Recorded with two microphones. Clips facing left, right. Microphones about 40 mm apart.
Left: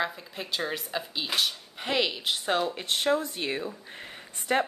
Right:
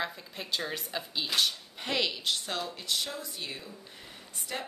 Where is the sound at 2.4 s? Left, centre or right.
Left.